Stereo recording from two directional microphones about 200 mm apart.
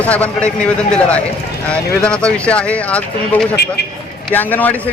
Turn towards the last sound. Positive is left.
turn(degrees=10)  # may be behind; listen again after turning